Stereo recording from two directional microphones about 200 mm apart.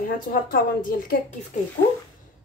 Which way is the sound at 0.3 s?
45° left (ahead or behind).